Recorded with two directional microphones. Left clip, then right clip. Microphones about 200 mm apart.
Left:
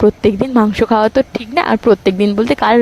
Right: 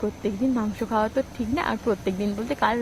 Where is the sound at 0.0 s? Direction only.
50° left (ahead or behind).